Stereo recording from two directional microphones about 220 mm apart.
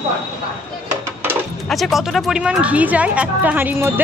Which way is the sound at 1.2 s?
Centre (ahead or behind).